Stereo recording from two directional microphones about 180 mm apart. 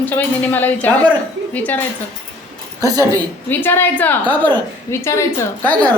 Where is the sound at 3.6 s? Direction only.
10° left (ahead or behind).